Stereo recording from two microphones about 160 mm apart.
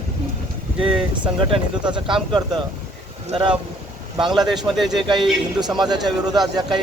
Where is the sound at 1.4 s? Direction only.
35° right (ahead or behind).